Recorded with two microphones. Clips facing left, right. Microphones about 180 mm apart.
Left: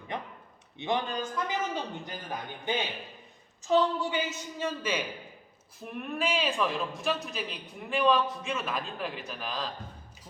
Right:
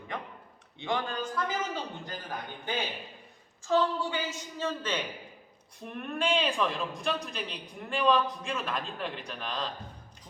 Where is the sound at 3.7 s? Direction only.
20° left (ahead or behind).